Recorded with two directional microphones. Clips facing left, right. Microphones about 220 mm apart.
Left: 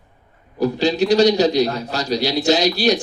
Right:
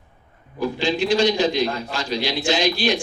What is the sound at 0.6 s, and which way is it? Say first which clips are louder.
A man's voice: left 4 dB; 40° left (ahead or behind).